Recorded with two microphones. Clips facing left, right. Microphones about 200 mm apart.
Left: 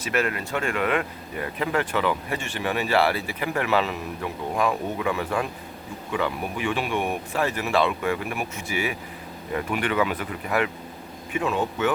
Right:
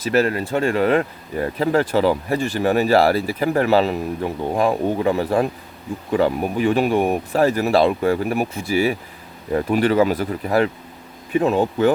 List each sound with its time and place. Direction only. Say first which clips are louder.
0.0 s speech: right 7 dB; 35° right (ahead or behind)